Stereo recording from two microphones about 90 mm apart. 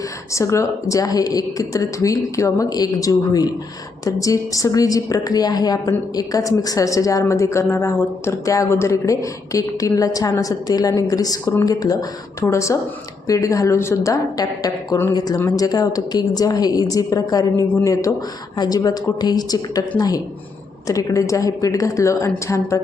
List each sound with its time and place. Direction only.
0.3 s a woman's voice: 35° left (ahead or behind)